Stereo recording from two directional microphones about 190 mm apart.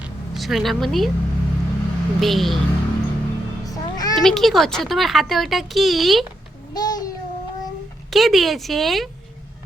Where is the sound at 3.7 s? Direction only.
20° left (ahead or behind).